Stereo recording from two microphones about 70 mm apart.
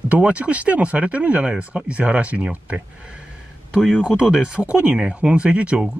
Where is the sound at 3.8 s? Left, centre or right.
Centre.